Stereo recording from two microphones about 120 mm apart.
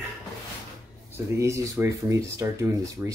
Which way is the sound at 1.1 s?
25° right (ahead or behind).